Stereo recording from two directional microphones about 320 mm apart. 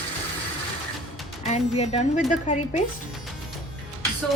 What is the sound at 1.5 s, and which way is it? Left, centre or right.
A woman's voice, centre.